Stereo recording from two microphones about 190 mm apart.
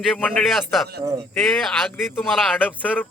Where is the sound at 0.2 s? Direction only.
5° left (ahead or behind).